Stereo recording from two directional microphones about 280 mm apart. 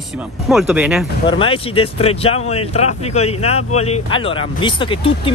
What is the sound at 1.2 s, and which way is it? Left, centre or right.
Speech, centre.